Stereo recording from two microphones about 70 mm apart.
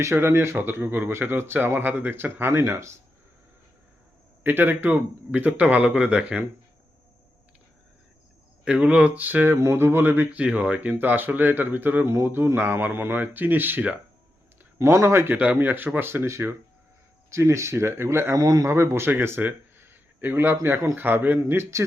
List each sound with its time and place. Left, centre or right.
0.0 s speech: right
4.4 s speech: right
8.6 s speech: centre
9.6 s speech: right
14.8 s speech: right
15.4 s speech: right
18.3 s a man's voice: right
18.7 s speech: right
21.5 s speech: right